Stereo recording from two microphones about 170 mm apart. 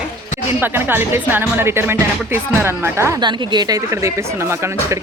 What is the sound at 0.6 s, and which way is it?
Speech, 10° right (ahead or behind).